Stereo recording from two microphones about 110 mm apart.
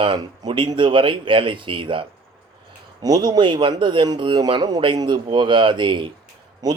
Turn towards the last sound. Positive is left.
turn(degrees=-35)  # may be behind; listen again after turning